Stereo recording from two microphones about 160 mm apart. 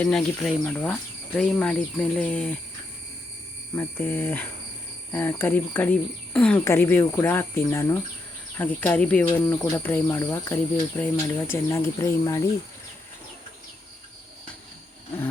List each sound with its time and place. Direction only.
0.0 s speech: 5° left (ahead or behind)
3.8 s speech: 10° left (ahead or behind)